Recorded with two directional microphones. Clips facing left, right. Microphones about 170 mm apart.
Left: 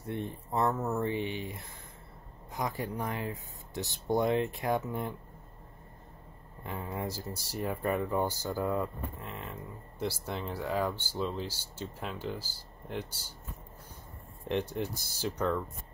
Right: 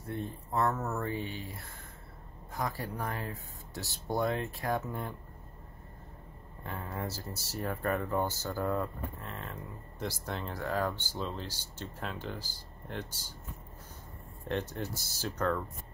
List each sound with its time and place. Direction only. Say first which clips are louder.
0.6 s speech: left 2 dB; 15° left (ahead or behind)
6.6 s speech: left 2 dB; 15° left (ahead or behind)
14.5 s speech: left 3 dB; 15° left (ahead or behind)